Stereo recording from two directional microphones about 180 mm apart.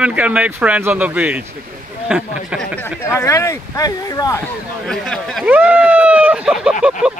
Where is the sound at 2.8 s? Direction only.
15° left (ahead or behind).